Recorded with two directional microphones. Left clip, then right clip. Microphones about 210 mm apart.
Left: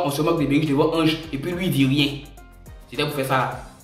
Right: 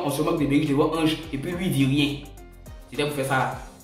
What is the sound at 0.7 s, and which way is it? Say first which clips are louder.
Speech: left 3 dB; 5° left (ahead or behind).